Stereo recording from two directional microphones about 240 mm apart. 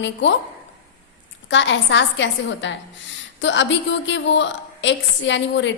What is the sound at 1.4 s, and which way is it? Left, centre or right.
A woman's voice, left.